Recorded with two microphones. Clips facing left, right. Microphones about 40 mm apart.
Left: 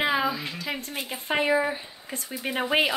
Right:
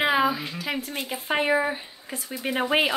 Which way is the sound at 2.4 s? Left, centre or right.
Centre.